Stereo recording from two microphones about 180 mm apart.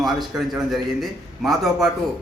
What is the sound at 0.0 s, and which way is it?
A man's voice, centre (ahead or behind).